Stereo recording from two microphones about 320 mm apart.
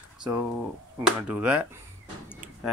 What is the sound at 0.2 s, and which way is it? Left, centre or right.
Speech, centre.